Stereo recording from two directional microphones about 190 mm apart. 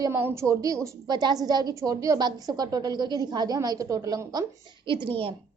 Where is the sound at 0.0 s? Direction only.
15° right (ahead or behind).